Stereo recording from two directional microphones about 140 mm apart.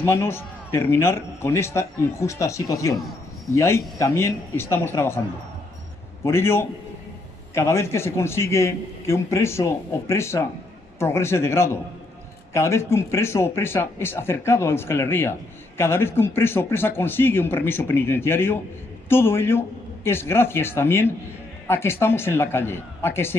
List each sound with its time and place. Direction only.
0.0 s a man's voice: 20° left (ahead or behind)
6.2 s a man's voice: 15° left (ahead or behind)